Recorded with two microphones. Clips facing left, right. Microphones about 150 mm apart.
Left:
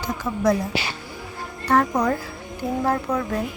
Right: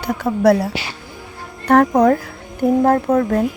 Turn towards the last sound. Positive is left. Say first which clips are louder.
# right 8 dB
turn(degrees=-50)  # may be behind; listen again after turning